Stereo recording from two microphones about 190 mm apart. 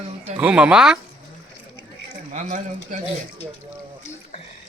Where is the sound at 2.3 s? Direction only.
40° right (ahead or behind).